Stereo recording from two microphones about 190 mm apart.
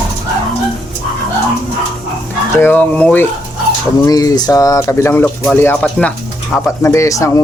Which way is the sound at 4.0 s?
20° left (ahead or behind).